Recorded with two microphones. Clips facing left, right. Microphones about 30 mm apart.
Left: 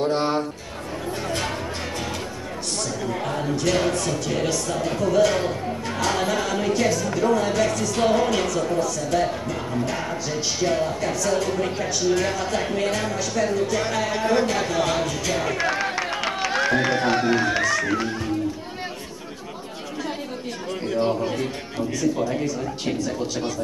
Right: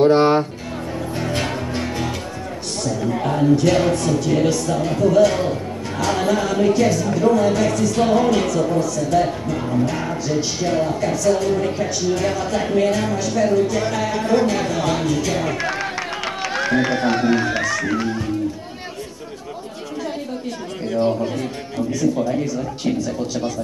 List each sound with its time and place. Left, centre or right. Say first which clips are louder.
0.0 s speech: right 8 dB; right
1.3 s music: right 4 dB; centre
2.8 s speech: right 7 dB; centre
20.8 s speech: right 3 dB; centre